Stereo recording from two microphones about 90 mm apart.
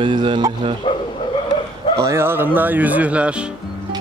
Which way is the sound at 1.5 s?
55° left (ahead or behind).